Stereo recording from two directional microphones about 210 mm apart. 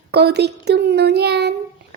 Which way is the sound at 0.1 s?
50° right (ahead or behind).